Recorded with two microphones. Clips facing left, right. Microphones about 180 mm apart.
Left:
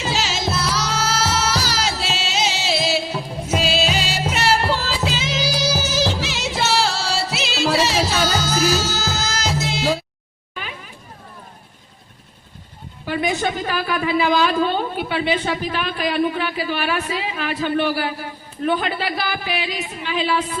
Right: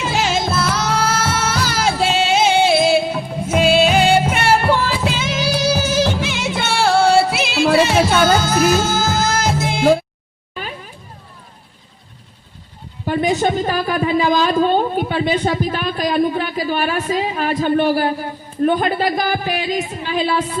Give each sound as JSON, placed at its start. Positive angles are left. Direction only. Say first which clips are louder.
{"t": 0.0, "sound": "music", "louder": "right 4 dB", "side_deg": -55}
{"t": 13.1, "sound": "a woman's voice", "louder": "right 5 dB", "side_deg": -45}